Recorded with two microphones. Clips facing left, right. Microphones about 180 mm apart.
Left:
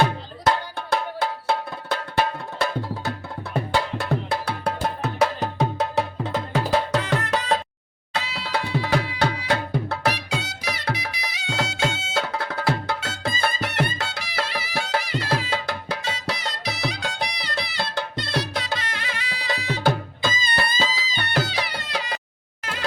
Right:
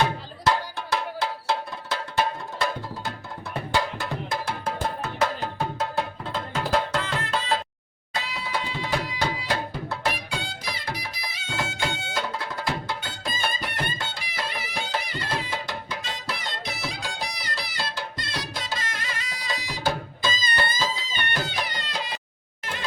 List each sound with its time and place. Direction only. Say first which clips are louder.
1.5 s percussion: left 3 dB; 55° left (ahead or behind)
3.9 s music: left 5 dB; 60° left (ahead or behind)